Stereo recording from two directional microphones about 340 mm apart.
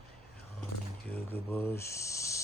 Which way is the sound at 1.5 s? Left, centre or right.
Centre.